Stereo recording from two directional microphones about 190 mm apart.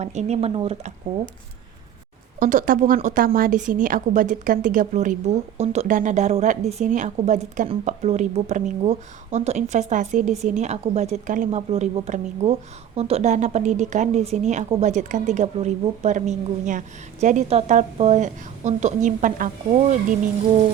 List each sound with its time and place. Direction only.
0.0 s speech: 35° right (ahead or behind)
2.4 s a woman's voice: 45° right (ahead or behind)